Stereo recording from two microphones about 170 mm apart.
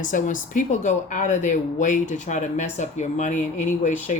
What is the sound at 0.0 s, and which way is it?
Speech, 50° left (ahead or behind).